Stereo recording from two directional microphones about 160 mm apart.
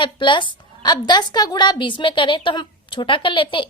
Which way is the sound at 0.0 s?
30° left (ahead or behind).